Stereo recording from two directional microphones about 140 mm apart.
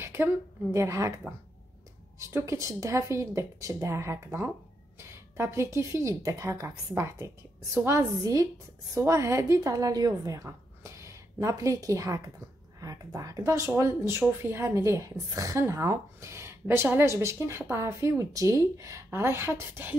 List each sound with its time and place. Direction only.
0.0 s a sound: 15° right (ahead or behind)
0.7 s a woman's voice: 20° right (ahead or behind)
2.1 s a woman's voice: 20° right (ahead or behind)